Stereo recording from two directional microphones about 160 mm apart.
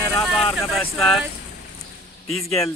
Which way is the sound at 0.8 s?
Centre (ahead or behind).